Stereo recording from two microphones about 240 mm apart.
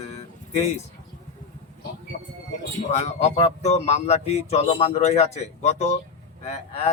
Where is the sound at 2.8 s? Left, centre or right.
Left.